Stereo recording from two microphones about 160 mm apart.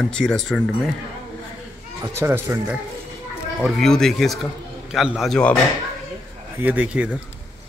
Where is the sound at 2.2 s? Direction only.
15° right (ahead or behind).